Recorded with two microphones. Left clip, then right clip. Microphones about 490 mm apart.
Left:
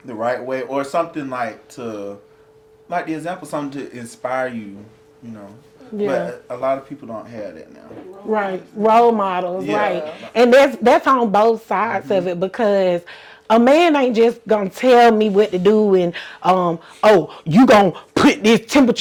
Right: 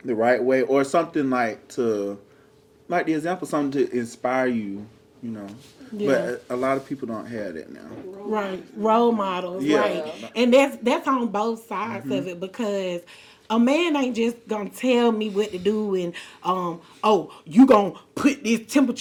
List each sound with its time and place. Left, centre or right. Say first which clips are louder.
0.2 s speech: right 2 dB; centre
6.1 s speech: even; centre
8.3 s speech: left 7 dB; left